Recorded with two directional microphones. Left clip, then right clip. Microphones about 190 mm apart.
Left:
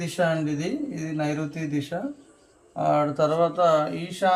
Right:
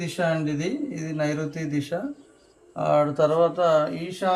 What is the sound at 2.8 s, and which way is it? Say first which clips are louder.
Speech: right 1 dB; 20° right (ahead or behind).